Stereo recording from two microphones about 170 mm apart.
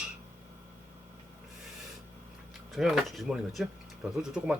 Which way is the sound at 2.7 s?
Centre (ahead or behind).